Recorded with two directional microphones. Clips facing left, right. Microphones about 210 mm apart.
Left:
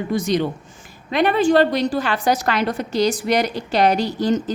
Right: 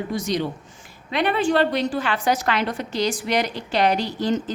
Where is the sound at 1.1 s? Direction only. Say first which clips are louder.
Left 5 dB; 45° left (ahead or behind).